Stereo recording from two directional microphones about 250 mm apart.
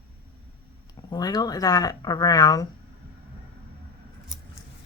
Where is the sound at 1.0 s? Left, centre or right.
Centre.